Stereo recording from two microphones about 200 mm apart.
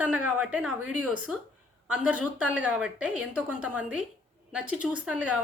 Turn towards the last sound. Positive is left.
turn(degrees=-5)  # may be behind; listen again after turning